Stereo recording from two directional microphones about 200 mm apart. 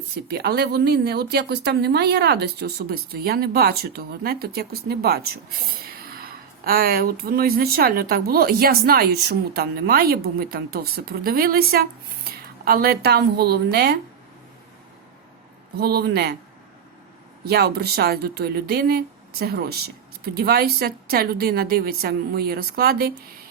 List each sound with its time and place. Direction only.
0.3 s speech: 55° right (ahead or behind)
15.8 s speech: 50° right (ahead or behind)
17.4 s speech: 50° right (ahead or behind)